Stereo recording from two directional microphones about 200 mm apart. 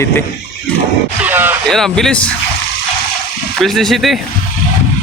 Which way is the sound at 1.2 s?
10° right (ahead or behind).